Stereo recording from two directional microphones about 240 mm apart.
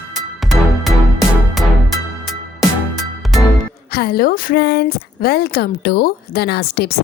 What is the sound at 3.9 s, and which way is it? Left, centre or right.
A woman's voice, left.